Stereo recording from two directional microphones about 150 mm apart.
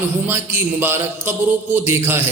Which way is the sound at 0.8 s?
15° right (ahead or behind).